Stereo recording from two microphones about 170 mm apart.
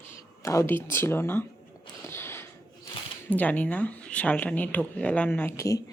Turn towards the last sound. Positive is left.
turn(degrees=15)  # may be behind; listen again after turning